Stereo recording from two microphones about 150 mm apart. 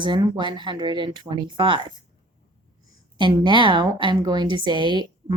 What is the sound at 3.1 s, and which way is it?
Speech, 30° right (ahead or behind).